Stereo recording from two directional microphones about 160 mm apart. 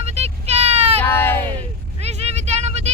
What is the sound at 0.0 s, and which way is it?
Vehicle, 40° right (ahead or behind).